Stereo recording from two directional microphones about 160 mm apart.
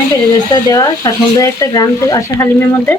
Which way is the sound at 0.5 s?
25° left (ahead or behind).